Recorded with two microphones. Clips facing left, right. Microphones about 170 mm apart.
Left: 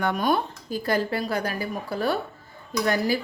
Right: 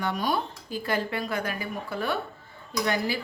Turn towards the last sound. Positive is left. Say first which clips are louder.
# left 4 dB
turn(degrees=40)  # may be behind; listen again after turning